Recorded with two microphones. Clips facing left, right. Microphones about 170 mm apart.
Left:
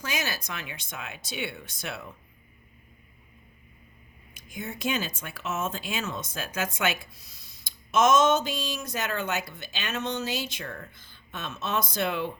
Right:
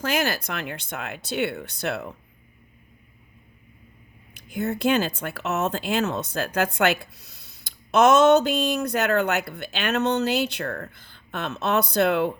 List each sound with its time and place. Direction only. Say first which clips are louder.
0.0 s speech: right 8 dB; 60° right (ahead or behind)
4.5 s speech: right 9 dB; 65° right (ahead or behind)